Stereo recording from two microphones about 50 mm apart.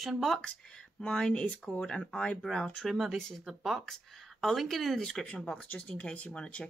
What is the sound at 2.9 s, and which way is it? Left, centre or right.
Speech, centre.